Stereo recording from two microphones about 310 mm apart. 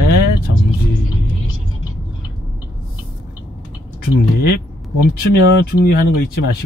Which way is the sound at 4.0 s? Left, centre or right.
Left.